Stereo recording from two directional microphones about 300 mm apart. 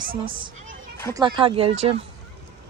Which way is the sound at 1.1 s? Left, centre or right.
Centre.